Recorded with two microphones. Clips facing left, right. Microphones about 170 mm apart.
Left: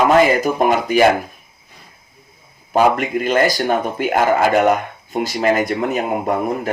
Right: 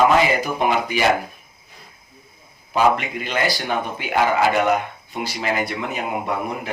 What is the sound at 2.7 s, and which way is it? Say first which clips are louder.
Speech: left 4 dB; 45° left (ahead or behind).